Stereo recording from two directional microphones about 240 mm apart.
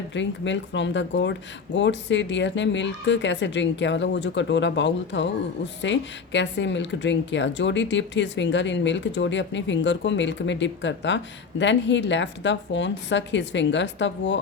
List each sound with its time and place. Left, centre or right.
0.1 s speech: left